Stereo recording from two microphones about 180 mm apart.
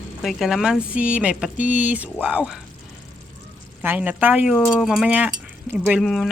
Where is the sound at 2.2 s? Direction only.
5° right (ahead or behind).